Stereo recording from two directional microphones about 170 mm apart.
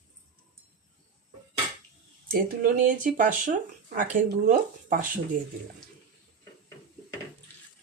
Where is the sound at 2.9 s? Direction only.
50° right (ahead or behind).